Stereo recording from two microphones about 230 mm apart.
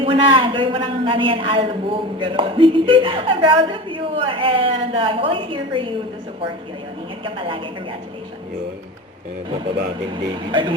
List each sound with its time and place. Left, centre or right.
0.0 s a man's voice: right
7.3 s a man's voice: right
10.5 s a man's voice: right